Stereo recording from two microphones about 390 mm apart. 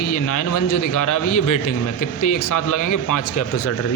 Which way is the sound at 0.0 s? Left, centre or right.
Left.